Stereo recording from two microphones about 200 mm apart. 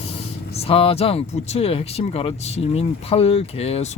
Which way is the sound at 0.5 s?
30° left (ahead or behind).